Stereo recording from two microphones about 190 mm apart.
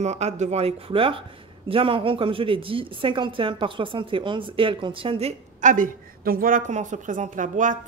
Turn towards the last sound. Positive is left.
turn(degrees=-40)  # may be behind; listen again after turning